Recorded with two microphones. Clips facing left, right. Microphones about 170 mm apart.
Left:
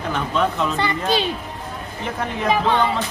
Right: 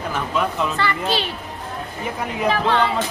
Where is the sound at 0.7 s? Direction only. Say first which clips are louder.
Left 1 dB; 15° left (ahead or behind).